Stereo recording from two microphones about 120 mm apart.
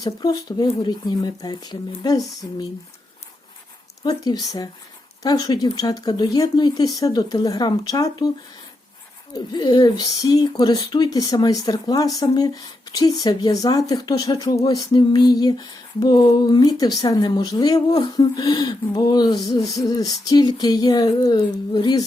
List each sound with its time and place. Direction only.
0.0 s speech: 35° left (ahead or behind)
4.0 s speech: 35° left (ahead or behind)
9.3 s speech: 35° left (ahead or behind)